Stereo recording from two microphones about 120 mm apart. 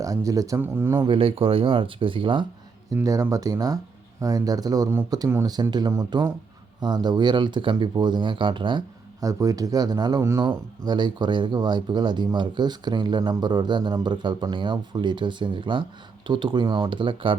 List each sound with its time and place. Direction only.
0.0 s speech: 30° right (ahead or behind)
1.0 s speech: 50° right (ahead or behind)
2.9 s speech: 25° right (ahead or behind); by 8.8 s 45° right (ahead or behind)
9.2 s speech: 30° right (ahead or behind)